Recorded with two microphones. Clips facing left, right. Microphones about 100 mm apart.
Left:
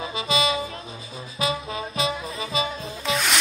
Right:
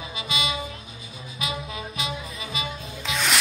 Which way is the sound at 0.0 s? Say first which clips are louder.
Left 6 dB; 35° left (ahead or behind).